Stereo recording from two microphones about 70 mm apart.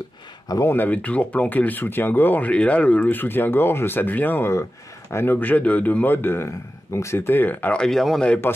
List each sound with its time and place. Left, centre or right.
0.7 s speech: left
7.7 s speech: centre
8.5 s a man's voice: left